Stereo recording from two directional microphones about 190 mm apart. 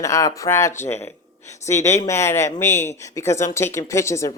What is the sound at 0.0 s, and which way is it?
Speech, 15° left (ahead or behind).